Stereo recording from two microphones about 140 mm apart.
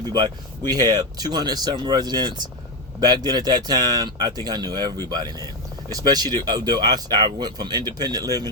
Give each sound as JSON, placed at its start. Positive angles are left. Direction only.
{"t": 0.7, "sound": "speech", "side_deg": -30}